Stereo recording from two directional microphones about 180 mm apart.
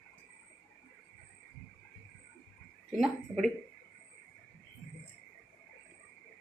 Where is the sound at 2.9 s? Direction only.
Centre (ahead or behind).